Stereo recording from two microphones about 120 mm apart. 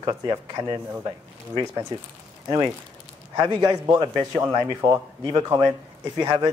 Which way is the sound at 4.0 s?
30° right (ahead or behind).